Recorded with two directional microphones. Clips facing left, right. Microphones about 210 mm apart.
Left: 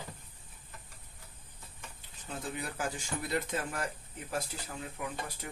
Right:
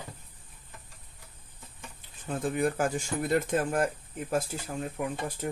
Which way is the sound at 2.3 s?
50° right (ahead or behind).